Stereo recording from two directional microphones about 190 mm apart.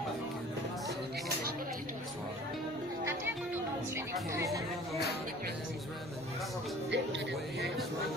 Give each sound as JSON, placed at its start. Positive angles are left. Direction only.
{"t": 3.9, "sound": "music", "side_deg": -15}
{"t": 6.9, "sound": "music", "side_deg": -70}